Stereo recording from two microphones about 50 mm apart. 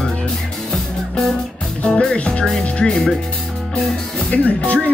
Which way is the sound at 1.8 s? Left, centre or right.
Centre.